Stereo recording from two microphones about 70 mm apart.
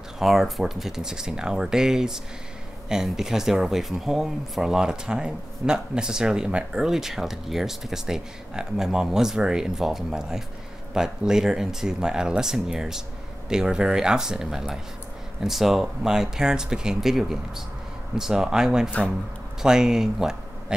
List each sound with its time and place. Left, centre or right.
0.2 s speech: centre
18.9 s speech: left
19.6 s speech: centre